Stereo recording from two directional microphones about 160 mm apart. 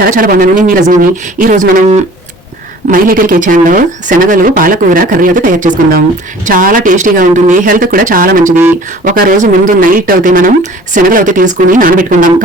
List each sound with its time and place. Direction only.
0.0 s speech: 60° right (ahead or behind)